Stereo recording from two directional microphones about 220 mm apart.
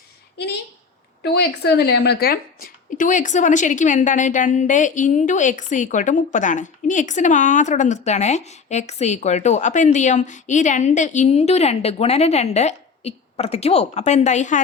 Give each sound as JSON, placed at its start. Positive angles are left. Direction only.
{"t": 1.2, "sound": "speech", "side_deg": 45}